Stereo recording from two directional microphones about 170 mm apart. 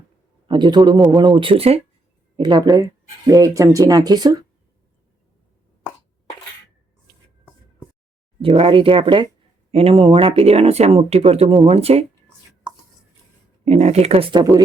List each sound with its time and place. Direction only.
0.4 s a man's voice: 25° right (ahead or behind)
8.4 s speech: 35° right (ahead or behind)
13.7 s speech: 40° right (ahead or behind)